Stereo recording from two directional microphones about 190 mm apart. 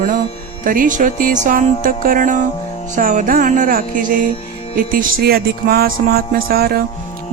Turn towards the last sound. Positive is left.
turn(degrees=-55)  # may be behind; listen again after turning